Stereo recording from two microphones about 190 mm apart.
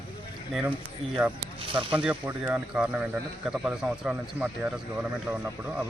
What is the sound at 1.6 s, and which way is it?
Speech, 25° right (ahead or behind).